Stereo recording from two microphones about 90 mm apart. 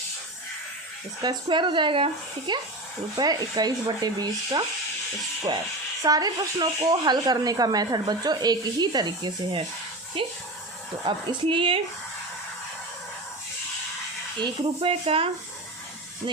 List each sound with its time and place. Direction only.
1.2 s speech: 55° right (ahead or behind)
2.5 s speech: 55° right (ahead or behind)
6.0 s speech: 45° right (ahead or behind)
10.2 s speech: 90° right
11.0 s a woman's voice: 70° right (ahead or behind)
14.3 s speech: 65° right (ahead or behind); by 15.3 s 90° right